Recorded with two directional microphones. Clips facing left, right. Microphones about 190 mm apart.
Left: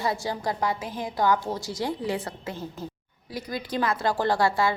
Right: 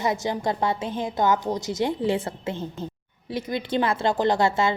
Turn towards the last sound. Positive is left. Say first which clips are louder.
# right 2 dB
turn(degrees=-25)  # may be behind; listen again after turning